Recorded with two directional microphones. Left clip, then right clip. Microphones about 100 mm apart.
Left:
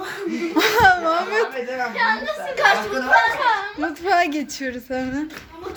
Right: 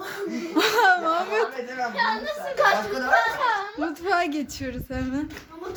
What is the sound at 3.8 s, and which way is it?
A child's voice, 25° right (ahead or behind).